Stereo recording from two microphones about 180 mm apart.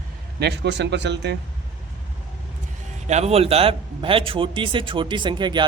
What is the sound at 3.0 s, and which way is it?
Speech, 35° right (ahead or behind).